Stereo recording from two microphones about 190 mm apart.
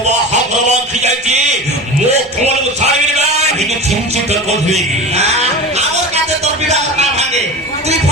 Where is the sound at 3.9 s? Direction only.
35° right (ahead or behind).